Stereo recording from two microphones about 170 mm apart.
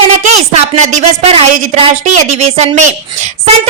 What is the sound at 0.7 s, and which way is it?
Speech, 40° right (ahead or behind).